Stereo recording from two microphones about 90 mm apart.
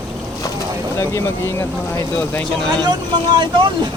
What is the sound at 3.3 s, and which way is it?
Speech, 60° right (ahead or behind).